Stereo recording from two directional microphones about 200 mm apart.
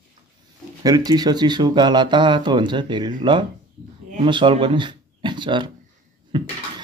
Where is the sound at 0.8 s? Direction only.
20° right (ahead or behind).